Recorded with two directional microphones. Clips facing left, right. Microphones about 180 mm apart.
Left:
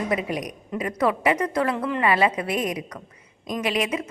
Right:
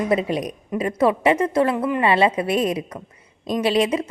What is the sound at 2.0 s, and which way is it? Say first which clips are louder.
A woman's voice: right 3 dB; 25° right (ahead or behind).